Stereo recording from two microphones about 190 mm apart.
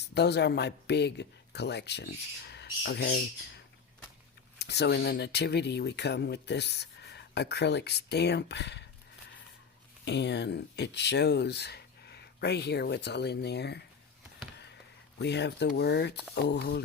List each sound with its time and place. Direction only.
0.0 s speech: 60° left (ahead or behind)
10.1 s speech: 65° left (ahead or behind)
15.2 s speech: 65° left (ahead or behind)